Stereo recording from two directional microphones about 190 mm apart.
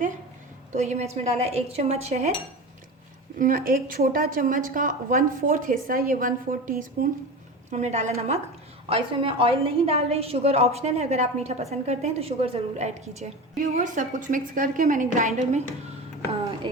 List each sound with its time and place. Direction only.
0.7 s a woman's voice: 40° right (ahead or behind)
3.3 s a woman's voice: 45° right (ahead or behind)